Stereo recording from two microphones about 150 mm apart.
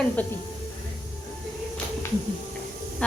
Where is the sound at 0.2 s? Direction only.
10° left (ahead or behind).